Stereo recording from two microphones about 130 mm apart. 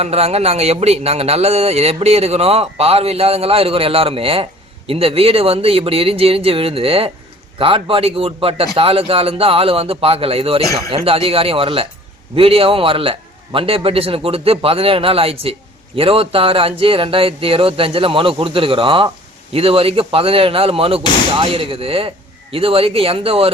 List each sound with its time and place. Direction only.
0.0 s speech: 55° right (ahead or behind)